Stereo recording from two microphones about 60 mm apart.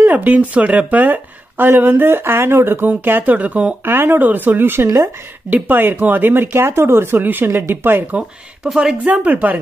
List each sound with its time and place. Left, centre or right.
0.1 s speech: right
2.9 s speech: right
3.8 s speech: right
4.8 s speech: right
5.5 s speech: right
8.7 s speech: centre